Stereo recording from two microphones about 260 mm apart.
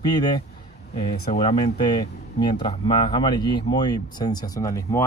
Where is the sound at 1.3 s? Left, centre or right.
Left.